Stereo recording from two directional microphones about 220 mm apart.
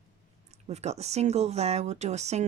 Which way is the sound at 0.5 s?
30° right (ahead or behind).